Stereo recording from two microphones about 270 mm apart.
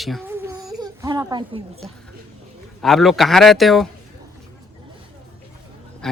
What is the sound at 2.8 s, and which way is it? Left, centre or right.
Speech, centre.